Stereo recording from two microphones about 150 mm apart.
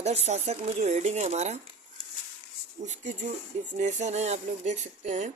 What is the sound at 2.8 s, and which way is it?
Speech, 50° right (ahead or behind).